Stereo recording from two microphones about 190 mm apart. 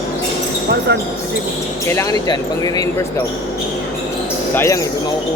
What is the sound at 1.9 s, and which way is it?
Speech, 20° left (ahead or behind).